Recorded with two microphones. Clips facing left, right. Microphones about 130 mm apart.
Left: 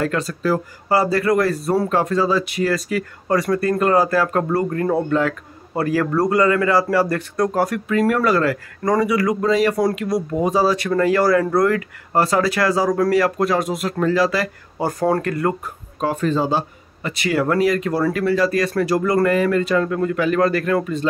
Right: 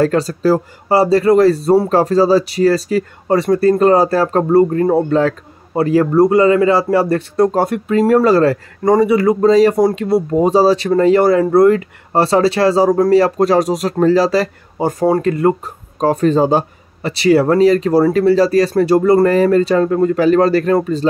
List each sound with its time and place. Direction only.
0.0 s speech: 35° right (ahead or behind)
16.0 s speech: 40° right (ahead or behind)
17.1 s speech: 30° right (ahead or behind)